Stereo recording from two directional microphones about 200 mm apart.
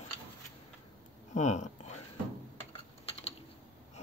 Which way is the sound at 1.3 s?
35° left (ahead or behind).